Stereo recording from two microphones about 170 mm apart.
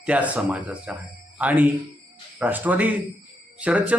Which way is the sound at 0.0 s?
10° right (ahead or behind).